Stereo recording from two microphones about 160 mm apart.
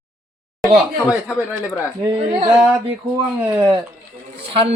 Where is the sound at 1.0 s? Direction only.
15° left (ahead or behind).